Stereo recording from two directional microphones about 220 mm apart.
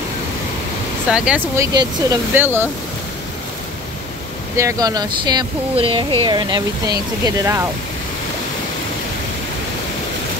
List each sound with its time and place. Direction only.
1.1 s speech: 5° right (ahead or behind)
4.6 s speech: 15° right (ahead or behind)